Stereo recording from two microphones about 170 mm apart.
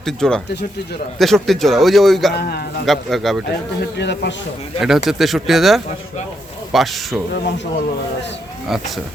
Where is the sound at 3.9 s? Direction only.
90° left.